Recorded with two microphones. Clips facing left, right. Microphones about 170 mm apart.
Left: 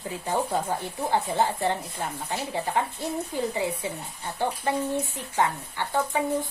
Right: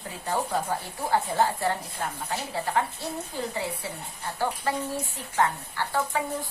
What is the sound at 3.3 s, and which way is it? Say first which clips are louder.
Speech: left 4 dB; 15° left (ahead or behind).